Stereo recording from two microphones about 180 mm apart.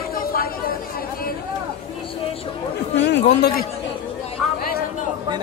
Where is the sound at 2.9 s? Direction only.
80° left.